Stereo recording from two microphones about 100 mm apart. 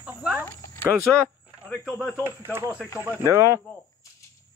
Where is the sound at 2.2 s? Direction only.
25° right (ahead or behind).